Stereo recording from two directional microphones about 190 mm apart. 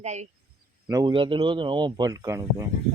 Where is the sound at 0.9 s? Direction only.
20° right (ahead or behind).